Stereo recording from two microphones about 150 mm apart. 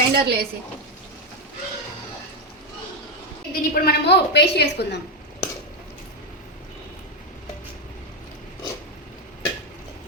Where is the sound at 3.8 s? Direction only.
90° left.